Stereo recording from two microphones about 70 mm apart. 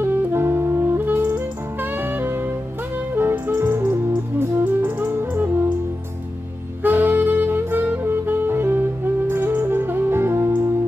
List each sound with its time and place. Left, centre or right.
0.0 s music: right
6.8 s saxophone: right